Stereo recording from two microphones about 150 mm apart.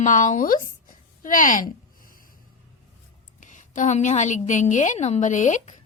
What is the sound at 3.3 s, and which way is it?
A woman's voice, 55° left (ahead or behind).